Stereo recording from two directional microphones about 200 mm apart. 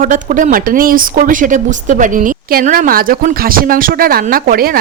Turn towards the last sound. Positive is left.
turn(degrees=-45)  # may be behind; listen again after turning